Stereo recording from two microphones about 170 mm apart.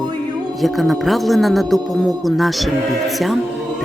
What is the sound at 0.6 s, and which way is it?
A man's voice, centre (ahead or behind).